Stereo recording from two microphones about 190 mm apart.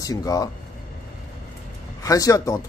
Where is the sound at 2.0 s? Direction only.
20° left (ahead or behind).